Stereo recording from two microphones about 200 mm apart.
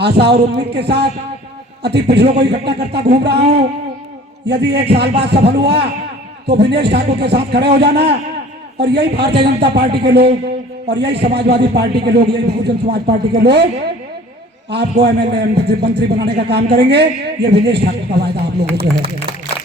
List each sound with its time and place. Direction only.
0.0 s a man's voice: 55° right (ahead or behind)
15.0 s a man's voice: 55° right (ahead or behind)